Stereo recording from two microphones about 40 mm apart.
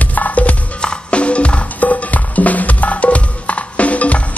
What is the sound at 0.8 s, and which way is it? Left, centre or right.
Music, left.